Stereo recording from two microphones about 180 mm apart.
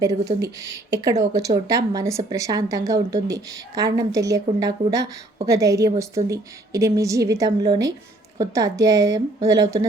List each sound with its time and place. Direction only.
0.0 s a woman's voice: 20° right (ahead or behind)